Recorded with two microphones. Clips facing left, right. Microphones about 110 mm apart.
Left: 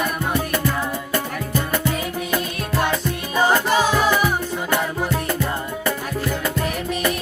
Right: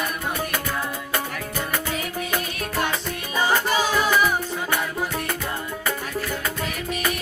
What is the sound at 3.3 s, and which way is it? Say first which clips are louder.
Music: left 4 dB; 45° left (ahead or behind).